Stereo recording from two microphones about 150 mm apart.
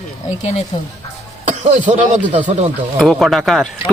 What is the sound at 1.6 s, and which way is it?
Speech, 55° right (ahead or behind).